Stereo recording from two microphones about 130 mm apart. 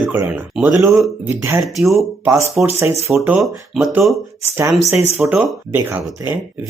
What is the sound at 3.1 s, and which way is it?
Speech, 10° right (ahead or behind).